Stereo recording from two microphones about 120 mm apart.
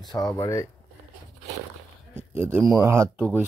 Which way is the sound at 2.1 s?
20° right (ahead or behind).